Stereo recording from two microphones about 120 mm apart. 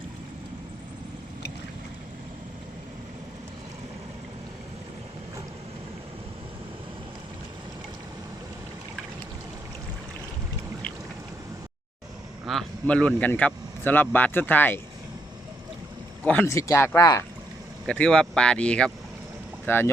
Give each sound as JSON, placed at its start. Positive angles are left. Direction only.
{"t": 12.5, "sound": "speech", "side_deg": 5}
{"t": 16.2, "sound": "speech", "side_deg": 10}
{"t": 16.5, "sound": "speech", "side_deg": 25}
{"t": 17.8, "sound": "speech", "side_deg": 5}